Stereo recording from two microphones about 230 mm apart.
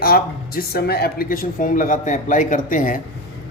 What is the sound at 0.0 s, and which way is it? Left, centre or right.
A man's voice, left.